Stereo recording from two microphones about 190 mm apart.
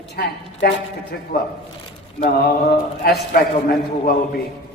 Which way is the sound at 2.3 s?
55° left (ahead or behind).